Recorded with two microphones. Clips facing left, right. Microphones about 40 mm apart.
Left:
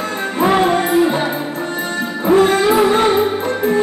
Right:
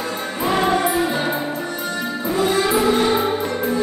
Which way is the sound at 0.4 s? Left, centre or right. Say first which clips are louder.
Left 4 dB; left.